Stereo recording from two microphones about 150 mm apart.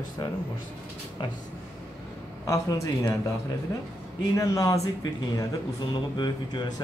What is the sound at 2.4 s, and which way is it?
Speech, 20° left (ahead or behind).